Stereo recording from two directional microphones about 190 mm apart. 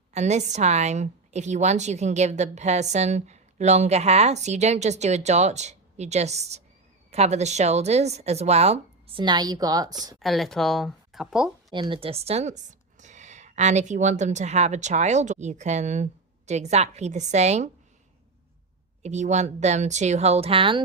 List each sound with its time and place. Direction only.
0.1 s a woman's voice: 35° right (ahead or behind); by 10.2 s 20° right (ahead or behind)
10.2 s speech: centre (ahead or behind)
11.7 s a woman's voice: 25° right (ahead or behind)
19.0 s a woman's voice: 40° right (ahead or behind)